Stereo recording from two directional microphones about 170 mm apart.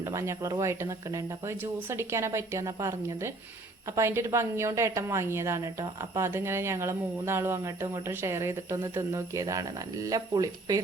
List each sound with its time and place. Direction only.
0.0 s speech: 15° right (ahead or behind)